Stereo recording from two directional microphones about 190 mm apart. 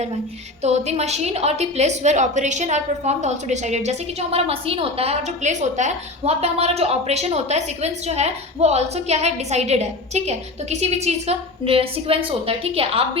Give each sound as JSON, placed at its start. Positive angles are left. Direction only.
{"t": 0.6, "sound": "a woman's voice", "side_deg": -35}